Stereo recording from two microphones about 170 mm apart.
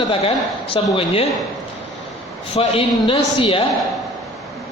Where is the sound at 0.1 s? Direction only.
30° left (ahead or behind).